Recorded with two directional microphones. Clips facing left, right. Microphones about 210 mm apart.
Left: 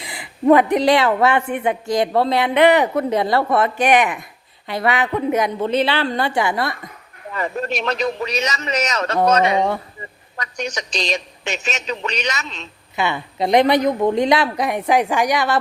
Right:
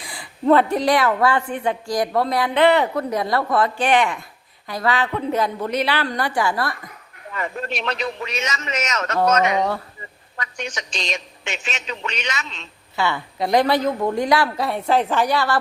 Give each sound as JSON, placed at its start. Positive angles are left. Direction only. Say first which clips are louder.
{"t": 0.0, "sound": "a sound", "louder": "left 4 dB", "side_deg": 20}
{"t": 0.8, "sound": "speech", "louder": "left 3 dB", "side_deg": 25}
{"t": 7.3, "sound": "a woman's voice", "louder": "left 4 dB", "side_deg": 40}
{"t": 10.3, "sound": "a woman's voice", "louder": "left 4 dB", "side_deg": 40}
{"t": 13.0, "sound": "speech", "louder": "left 2 dB", "side_deg": 20}